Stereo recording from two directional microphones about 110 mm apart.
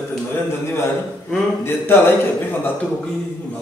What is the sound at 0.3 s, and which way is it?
A man's voice, 20° left (ahead or behind).